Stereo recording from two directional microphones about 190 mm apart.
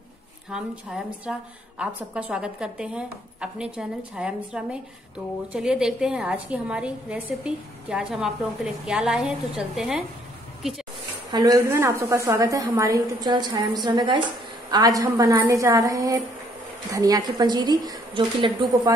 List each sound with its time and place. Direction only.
0.5 s speech: 5° right (ahead or behind)
11.3 s a woman's voice: 20° right (ahead or behind)